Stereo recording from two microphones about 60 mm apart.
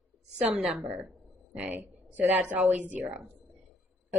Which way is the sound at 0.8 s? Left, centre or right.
Right.